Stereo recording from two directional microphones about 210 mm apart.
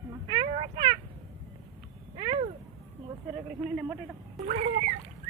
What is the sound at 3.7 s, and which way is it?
Speech, 5° right (ahead or behind).